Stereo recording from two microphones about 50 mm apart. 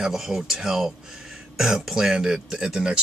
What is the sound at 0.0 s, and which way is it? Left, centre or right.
Speech, centre.